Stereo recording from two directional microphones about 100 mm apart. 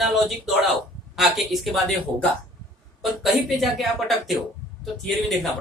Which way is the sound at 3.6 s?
Centre (ahead or behind).